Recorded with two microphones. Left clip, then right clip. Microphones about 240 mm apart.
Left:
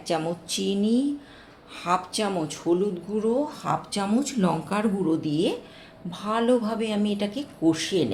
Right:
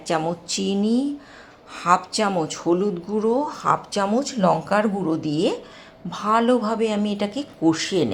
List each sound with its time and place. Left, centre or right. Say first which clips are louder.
0.0 s speech: right 4 dB; centre